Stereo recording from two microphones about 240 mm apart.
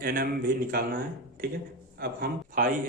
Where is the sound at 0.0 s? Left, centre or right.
Right.